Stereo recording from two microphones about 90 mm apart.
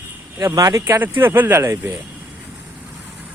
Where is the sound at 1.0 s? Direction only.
25° right (ahead or behind).